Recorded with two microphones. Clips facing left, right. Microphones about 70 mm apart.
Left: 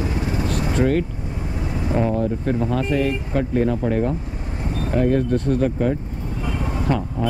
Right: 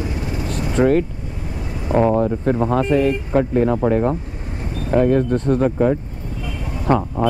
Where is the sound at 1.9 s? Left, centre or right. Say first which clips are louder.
Right 5 dB; right.